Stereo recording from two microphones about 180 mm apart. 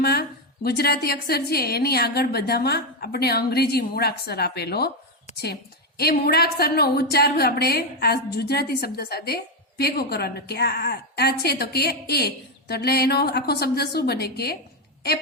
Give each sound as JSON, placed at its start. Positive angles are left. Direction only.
{"t": 0.0, "sound": "a woman's voice", "side_deg": 60}
{"t": 6.0, "sound": "a woman's voice", "side_deg": 60}